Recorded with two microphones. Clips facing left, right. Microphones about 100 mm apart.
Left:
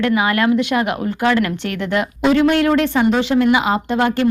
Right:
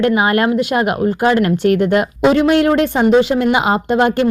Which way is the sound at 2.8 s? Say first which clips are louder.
Right 4 dB; 25° right (ahead or behind).